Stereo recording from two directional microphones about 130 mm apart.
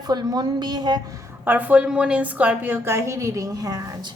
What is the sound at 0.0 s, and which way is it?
A woman's voice, 30° right (ahead or behind).